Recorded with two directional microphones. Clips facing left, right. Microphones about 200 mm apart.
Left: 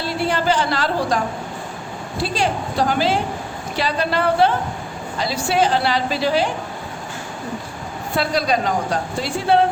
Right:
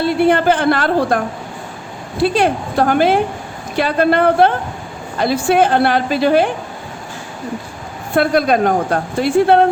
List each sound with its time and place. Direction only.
0.0 s a woman's voice: 55° right (ahead or behind)
2.2 s a woman's voice: 55° right (ahead or behind)
8.1 s a woman's voice: 55° right (ahead or behind)